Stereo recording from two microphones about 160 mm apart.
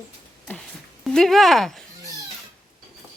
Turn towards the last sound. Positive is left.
turn(degrees=0)  # may be behind; listen again after turning